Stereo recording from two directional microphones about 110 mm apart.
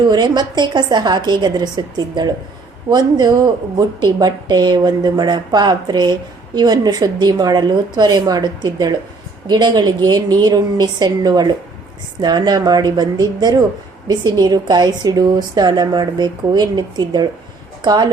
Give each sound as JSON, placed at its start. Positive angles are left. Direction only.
{"t": 0.1, "sound": "a woman's voice", "side_deg": -40}